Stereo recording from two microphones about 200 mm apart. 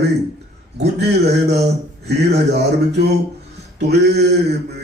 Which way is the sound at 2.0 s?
55° right (ahead or behind).